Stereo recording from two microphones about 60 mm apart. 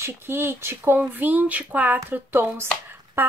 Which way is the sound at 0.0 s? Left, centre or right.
Right.